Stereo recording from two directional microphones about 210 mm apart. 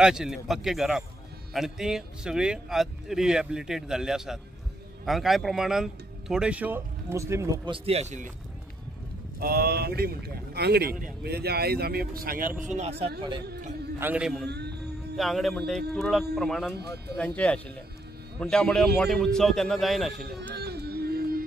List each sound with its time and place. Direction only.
0.0 s speech: 5° right (ahead or behind); by 8.3 s 35° right (ahead or behind)
9.4 s a man's voice: 45° right (ahead or behind)
13.9 s speech: 10° right (ahead or behind)
14.5 s music: 50° right (ahead or behind)
15.1 s speech: centre (ahead or behind)
20.5 s music: 50° right (ahead or behind)